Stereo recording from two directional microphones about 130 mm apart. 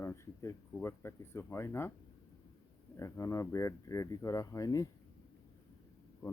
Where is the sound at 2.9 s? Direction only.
25° left (ahead or behind).